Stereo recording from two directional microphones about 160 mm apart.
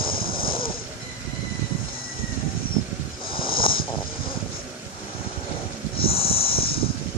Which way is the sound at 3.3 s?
35° left (ahead or behind).